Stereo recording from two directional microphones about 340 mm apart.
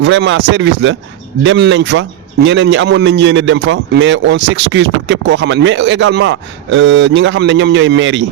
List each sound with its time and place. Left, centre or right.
0.0 s a man's voice: right